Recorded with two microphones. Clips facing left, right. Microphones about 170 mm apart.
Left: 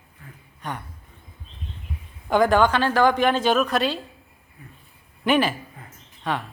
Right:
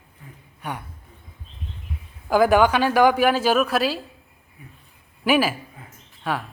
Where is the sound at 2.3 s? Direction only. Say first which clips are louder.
Right 1 dB; 10° right (ahead or behind).